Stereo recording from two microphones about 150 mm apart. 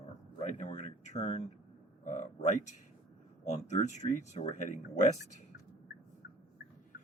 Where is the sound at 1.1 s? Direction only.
50° left (ahead or behind).